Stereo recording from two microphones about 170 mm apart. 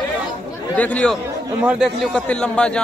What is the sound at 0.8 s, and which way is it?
Speech, 10° left (ahead or behind).